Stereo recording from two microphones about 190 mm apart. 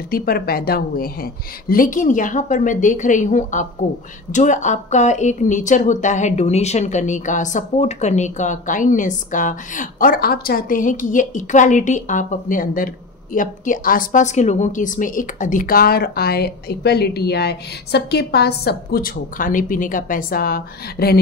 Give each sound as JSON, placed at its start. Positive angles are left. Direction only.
{"t": 0.1, "sound": "a woman's voice", "side_deg": 50}